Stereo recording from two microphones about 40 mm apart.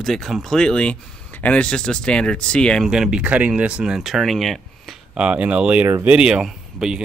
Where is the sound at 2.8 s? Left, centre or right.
Centre.